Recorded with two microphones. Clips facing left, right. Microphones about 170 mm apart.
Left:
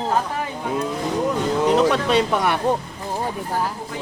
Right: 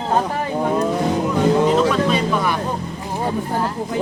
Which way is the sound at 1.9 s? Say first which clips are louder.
Right 1 dB; 70° left (ahead or behind).